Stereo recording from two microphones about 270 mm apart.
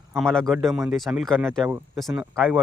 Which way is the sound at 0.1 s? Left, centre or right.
Centre.